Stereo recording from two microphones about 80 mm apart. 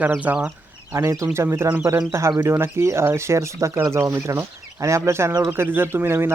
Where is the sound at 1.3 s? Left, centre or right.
Right.